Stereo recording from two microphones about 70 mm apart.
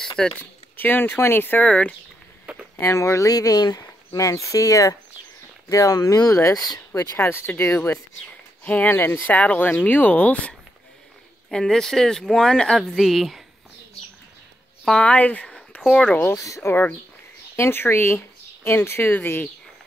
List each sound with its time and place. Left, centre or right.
0.4 s speech: left
1.6 s speech: centre
2.8 s speech: left
4.2 s speech: left
7.2 s speech: left
8.6 s speech: left
8.9 s speech: left
11.5 s speech: centre
14.9 s speech: centre
15.4 s a sound: centre
16.0 s speech: left
16.3 s speech: left
17.6 s speech: left